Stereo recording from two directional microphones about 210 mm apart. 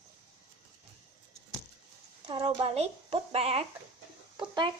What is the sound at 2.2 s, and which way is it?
A child's voice, 25° right (ahead or behind).